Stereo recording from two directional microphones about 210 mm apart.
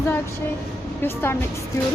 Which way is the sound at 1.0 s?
10° left (ahead or behind).